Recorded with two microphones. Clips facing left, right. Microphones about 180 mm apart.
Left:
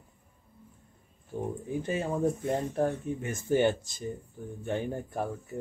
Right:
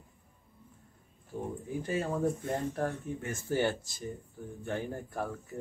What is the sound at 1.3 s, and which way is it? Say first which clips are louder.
Speech: left 3 dB; 15° left (ahead or behind).